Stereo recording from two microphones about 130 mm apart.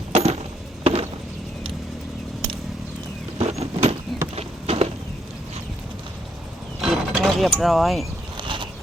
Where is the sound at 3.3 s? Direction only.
55° right (ahead or behind).